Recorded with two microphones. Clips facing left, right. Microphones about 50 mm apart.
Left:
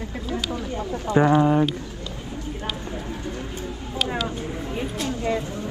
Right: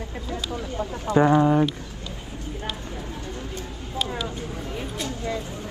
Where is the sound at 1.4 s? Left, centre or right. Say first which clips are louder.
Even; centre.